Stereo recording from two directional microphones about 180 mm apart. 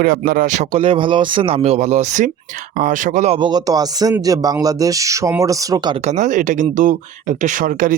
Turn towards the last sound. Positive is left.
turn(degrees=-50)  # may be behind; listen again after turning